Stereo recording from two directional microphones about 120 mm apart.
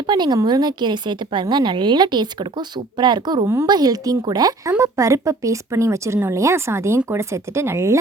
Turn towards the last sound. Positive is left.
turn(degrees=-25)  # may be behind; listen again after turning